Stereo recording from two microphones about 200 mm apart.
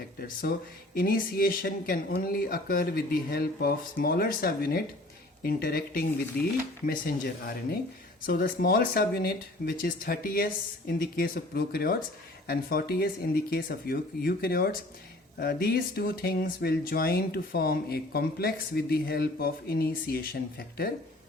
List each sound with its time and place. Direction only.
0.9 s speech: 45° left (ahead or behind)